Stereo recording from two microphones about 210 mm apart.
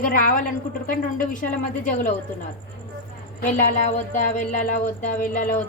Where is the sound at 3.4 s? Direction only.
35° left (ahead or behind).